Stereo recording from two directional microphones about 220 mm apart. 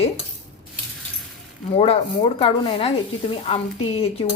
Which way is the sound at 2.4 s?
25° left (ahead or behind).